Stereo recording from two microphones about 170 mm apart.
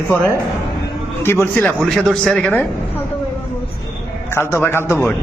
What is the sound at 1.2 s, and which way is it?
Speech, 15° left (ahead or behind).